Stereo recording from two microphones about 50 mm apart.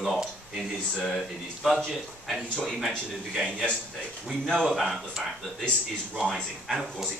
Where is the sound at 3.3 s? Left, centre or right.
Centre.